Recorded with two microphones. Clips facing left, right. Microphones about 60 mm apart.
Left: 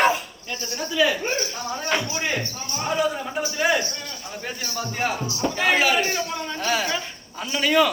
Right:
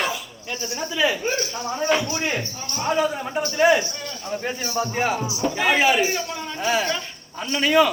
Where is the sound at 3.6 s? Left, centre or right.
Centre.